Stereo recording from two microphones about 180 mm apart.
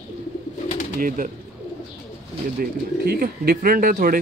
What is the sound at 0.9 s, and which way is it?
Speech, 50° right (ahead or behind).